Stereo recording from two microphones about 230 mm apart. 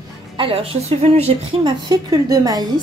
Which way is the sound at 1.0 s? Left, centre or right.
Right.